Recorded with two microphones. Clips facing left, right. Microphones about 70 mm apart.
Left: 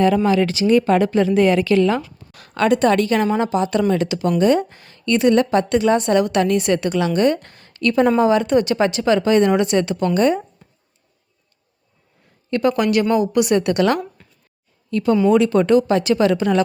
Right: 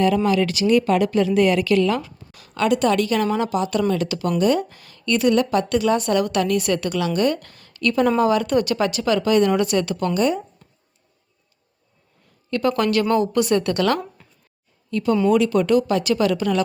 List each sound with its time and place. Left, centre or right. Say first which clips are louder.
0.0 s a woman's voice: left 2 dB; left
2.3 s a woman's voice: left 3 dB; left
10.2 s a woman's voice: left 4 dB; left
12.5 s a woman's voice: left 2 dB; left
14.2 s a sound: left 1 dB; centre
14.8 s a woman's voice: left 3 dB; left